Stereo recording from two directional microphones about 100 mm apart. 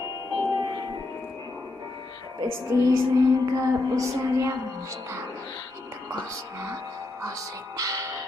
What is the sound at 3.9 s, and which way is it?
Speech, 30° right (ahead or behind).